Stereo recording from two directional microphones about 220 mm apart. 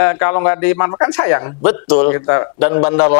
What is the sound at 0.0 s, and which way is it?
Speech, 15° left (ahead or behind).